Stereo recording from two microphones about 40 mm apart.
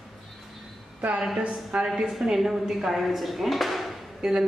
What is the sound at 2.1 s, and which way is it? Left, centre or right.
A woman's voice, centre.